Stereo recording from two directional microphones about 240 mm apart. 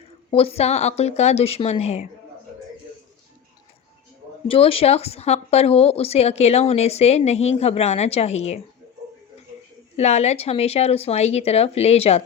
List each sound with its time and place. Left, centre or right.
0.3 s speech: left
4.4 s speech: left
10.0 s speech: left